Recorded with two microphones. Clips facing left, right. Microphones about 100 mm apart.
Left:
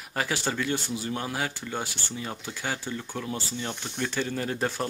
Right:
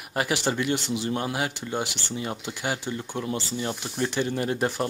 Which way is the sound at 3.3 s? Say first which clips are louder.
Right 4 dB; 10° right (ahead or behind).